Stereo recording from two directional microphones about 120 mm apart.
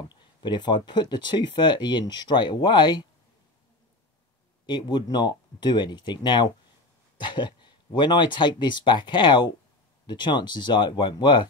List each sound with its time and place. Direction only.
0.1 s speech: 40° left (ahead or behind)
4.6 s speech: 40° left (ahead or behind)